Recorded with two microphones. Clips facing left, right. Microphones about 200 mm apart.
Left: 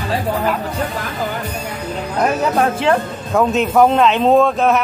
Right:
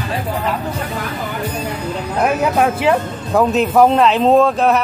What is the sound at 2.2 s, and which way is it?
A man's voice, 5° right (ahead or behind).